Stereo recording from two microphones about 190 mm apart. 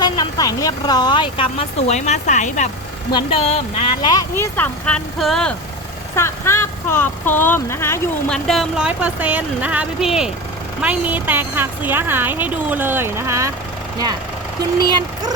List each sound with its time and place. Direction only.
0.0 s speech: 20° left (ahead or behind); by 2.6 s 40° left (ahead or behind)
3.1 s speech: 25° left (ahead or behind)
4.1 s speech: 20° left (ahead or behind)
4.5 s speech: 5° left (ahead or behind)
6.1 s a woman's voice: 15° left (ahead or behind); by 13.5 s 15° right (ahead or behind)
14.8 s speech: 25° right (ahead or behind)